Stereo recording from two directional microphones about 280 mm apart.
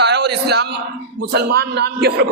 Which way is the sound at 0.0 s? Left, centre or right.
Right.